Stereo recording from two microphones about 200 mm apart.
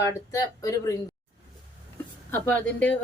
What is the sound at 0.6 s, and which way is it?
Speech, 15° left (ahead or behind).